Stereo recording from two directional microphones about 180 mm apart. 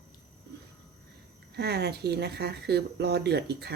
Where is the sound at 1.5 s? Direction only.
65° right (ahead or behind).